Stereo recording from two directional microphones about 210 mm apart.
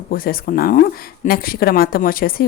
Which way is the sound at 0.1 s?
45° left (ahead or behind).